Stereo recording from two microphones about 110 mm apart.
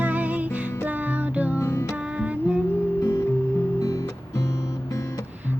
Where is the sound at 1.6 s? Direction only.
25° left (ahead or behind).